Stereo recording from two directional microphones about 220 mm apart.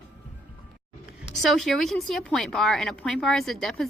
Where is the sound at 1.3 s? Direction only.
Centre (ahead or behind).